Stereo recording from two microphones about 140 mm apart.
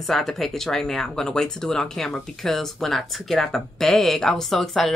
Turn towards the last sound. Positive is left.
turn(degrees=0)  # may be behind; listen again after turning